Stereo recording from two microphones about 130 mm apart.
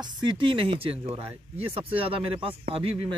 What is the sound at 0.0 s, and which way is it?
Speech, 35° right (ahead or behind).